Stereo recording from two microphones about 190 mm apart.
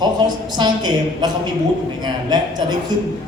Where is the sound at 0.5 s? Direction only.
20° right (ahead or behind).